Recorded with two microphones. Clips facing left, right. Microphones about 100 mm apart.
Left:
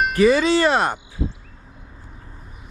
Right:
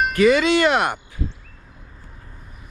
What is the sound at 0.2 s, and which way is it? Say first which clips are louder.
Speech: even; 30° left (ahead or behind).